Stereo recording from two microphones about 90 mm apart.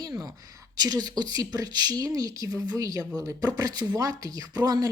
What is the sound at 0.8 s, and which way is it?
Speech, 45° right (ahead or behind).